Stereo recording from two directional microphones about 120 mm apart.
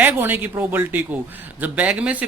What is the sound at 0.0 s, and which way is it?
Speech, 15° right (ahead or behind).